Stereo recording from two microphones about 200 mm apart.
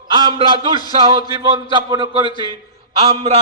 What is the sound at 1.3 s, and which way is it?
A man's voice, 20° right (ahead or behind).